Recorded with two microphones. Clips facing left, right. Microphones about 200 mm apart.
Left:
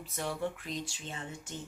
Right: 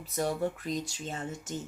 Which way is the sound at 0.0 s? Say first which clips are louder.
Right 5 dB; 40° right (ahead or behind).